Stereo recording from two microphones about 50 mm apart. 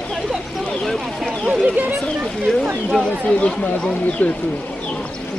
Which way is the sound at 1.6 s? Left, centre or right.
Right.